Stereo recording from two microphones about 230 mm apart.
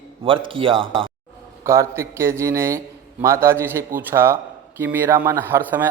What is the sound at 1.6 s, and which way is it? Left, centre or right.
A man's voice, centre.